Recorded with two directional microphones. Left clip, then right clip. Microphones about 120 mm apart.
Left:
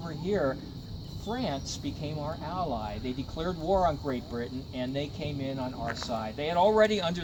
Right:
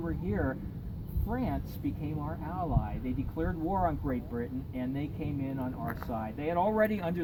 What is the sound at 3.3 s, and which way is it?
Speech, 25° left (ahead or behind).